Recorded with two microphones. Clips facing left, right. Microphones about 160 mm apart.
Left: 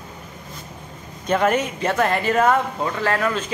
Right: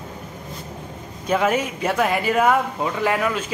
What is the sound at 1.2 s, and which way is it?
Speech, 5° right (ahead or behind).